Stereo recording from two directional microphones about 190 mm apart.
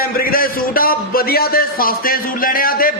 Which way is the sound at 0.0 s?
50° left (ahead or behind).